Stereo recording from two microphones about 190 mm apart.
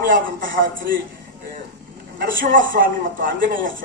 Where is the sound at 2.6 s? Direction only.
45° right (ahead or behind).